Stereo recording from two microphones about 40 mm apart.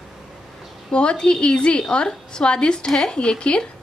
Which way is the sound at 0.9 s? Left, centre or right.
Left.